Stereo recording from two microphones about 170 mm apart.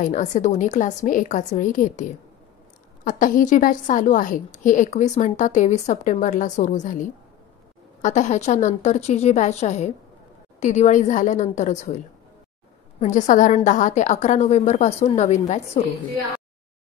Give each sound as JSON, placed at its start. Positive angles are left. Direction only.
{"t": 0.0, "sound": "a woman's voice", "side_deg": 45}
{"t": 8.0, "sound": "a woman's voice", "side_deg": 45}
{"t": 13.0, "sound": "a woman's voice", "side_deg": 50}